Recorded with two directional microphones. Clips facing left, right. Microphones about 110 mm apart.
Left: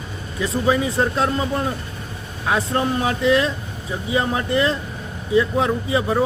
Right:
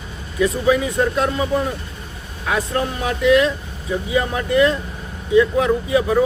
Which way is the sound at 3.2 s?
30° left (ahead or behind).